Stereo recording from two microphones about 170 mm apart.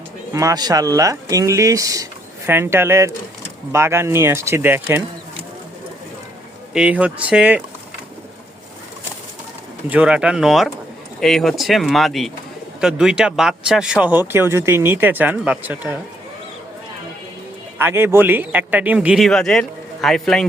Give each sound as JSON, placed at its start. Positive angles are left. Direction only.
{"t": 0.3, "sound": "speech", "side_deg": -20}
{"t": 6.7, "sound": "speech", "side_deg": -10}
{"t": 9.9, "sound": "speech", "side_deg": -5}
{"t": 17.7, "sound": "speech", "side_deg": -10}